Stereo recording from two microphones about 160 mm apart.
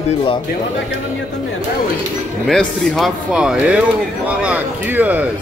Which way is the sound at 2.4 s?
Centre (ahead or behind).